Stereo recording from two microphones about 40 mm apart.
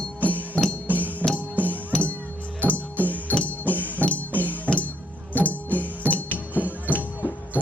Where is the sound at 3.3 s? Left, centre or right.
Left.